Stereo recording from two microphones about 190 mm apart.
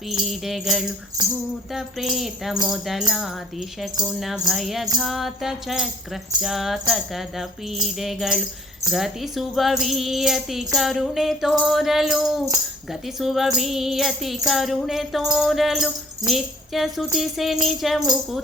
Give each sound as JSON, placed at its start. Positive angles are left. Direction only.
{"t": 0.1, "sound": "music", "side_deg": 0}
{"t": 1.2, "sound": "music", "side_deg": -20}
{"t": 1.7, "sound": "music", "side_deg": 0}